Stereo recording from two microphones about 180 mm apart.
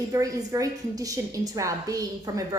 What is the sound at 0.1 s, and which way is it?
A woman's voice, 20° right (ahead or behind).